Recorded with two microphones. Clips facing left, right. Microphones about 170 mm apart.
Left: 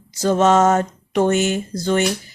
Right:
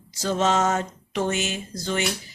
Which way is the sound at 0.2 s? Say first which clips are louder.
Left 7 dB; 50° left (ahead or behind).